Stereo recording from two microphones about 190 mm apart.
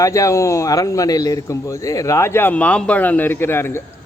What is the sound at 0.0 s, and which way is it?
Speech, 15° left (ahead or behind).